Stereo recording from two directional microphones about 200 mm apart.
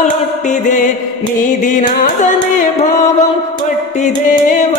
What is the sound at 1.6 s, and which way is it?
Music, 40° left (ahead or behind).